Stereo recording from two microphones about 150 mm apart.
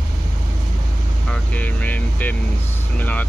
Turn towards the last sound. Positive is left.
turn(degrees=10)  # may be behind; listen again after turning